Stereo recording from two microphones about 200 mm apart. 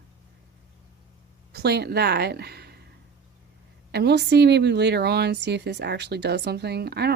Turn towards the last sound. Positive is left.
turn(degrees=-55)  # may be behind; listen again after turning